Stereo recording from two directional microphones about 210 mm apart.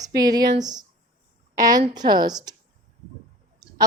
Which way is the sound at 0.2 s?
20° right (ahead or behind).